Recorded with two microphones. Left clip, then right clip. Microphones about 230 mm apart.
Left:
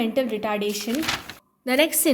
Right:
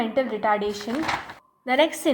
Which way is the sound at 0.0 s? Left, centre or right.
Left.